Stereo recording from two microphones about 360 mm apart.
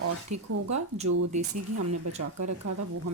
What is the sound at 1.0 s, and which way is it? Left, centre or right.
Speech, right.